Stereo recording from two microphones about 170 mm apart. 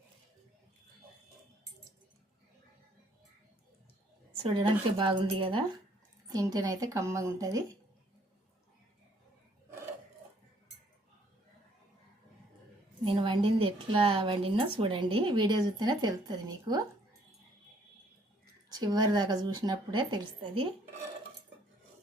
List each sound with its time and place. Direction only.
4.4 s a woman's voice: 30° right (ahead or behind)
13.1 s a woman's voice: 30° right (ahead or behind)
18.7 s a woman's voice: 25° right (ahead or behind)